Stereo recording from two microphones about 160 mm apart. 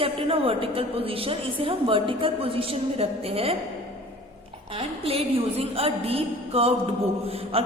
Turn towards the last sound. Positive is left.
turn(degrees=-35)  # may be behind; listen again after turning